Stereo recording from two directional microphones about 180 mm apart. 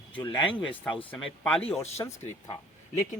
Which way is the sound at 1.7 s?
35° left (ahead or behind).